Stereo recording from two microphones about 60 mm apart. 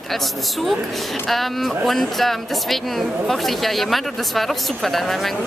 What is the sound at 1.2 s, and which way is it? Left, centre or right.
Speech, centre.